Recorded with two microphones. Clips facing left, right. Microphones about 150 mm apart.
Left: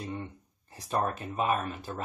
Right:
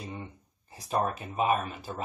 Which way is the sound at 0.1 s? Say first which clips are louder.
Left 3 dB; 10° right (ahead or behind).